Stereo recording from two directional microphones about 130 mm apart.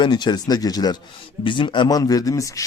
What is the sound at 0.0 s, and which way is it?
Speech, 35° left (ahead or behind).